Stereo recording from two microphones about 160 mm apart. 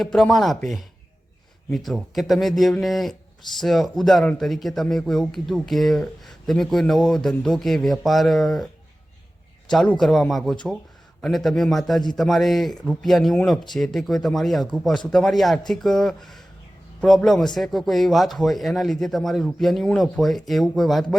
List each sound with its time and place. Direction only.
0.0 s speech: centre (ahead or behind)
9.7 s speech: 5° left (ahead or behind)